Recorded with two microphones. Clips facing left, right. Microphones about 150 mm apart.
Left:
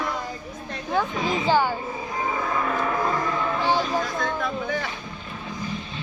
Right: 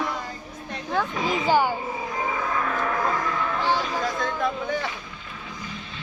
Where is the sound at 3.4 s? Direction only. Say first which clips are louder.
Left 2 dB; 20° left (ahead or behind).